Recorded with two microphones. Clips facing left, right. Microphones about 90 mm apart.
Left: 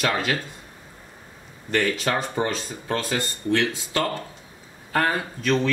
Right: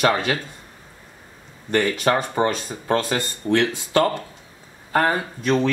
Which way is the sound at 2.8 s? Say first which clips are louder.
Right 5 dB; 35° right (ahead or behind).